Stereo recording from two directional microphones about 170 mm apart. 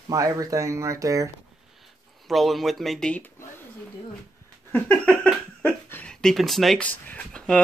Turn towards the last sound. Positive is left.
turn(degrees=5)  # may be behind; listen again after turning